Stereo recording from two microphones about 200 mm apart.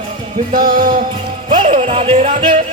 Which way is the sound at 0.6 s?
45° right (ahead or behind).